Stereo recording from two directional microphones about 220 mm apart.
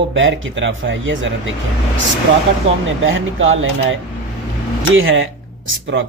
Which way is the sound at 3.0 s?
60° right (ahead or behind).